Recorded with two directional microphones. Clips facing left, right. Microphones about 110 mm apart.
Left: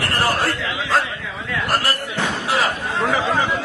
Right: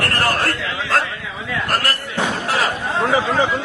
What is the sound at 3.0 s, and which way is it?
Chatter, 20° right (ahead or behind).